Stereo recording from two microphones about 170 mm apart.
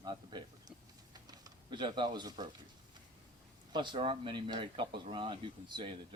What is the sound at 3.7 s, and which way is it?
Speech, 25° right (ahead or behind).